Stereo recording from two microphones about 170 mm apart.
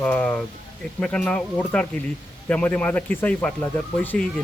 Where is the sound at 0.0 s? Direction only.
10° left (ahead or behind).